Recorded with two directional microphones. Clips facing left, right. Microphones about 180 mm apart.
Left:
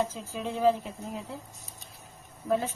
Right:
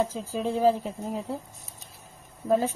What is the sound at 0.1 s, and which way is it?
Speech, 35° right (ahead or behind).